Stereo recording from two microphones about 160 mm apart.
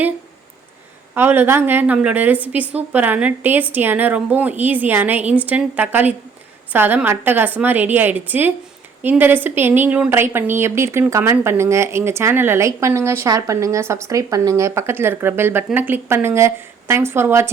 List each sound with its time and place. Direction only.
1.1 s speech: 15° right (ahead or behind)